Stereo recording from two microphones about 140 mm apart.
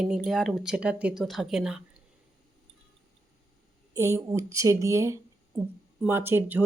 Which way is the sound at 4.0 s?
20° right (ahead or behind).